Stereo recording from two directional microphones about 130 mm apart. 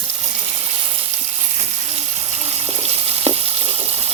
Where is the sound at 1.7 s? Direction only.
55° right (ahead or behind).